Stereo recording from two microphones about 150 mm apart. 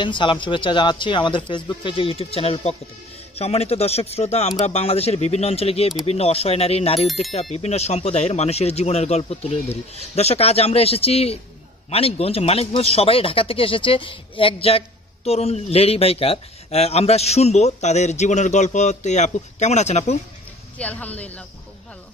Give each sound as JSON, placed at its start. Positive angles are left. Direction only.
{"t": 0.0, "sound": "speech", "side_deg": 35}
{"t": 20.7, "sound": "speech", "side_deg": 10}